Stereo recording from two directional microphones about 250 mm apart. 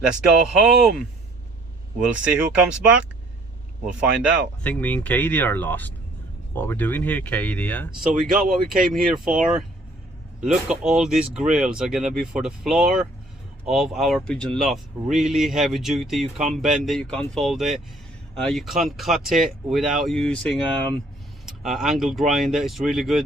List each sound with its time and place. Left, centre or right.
0.0 s speech: centre
8.9 s speech: centre
16.2 s speech: right
16.6 s speech: centre